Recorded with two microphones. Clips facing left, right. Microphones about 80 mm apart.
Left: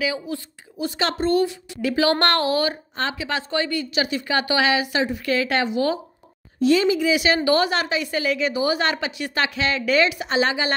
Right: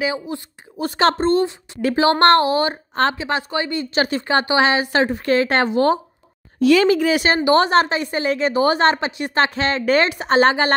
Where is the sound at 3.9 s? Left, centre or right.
Right.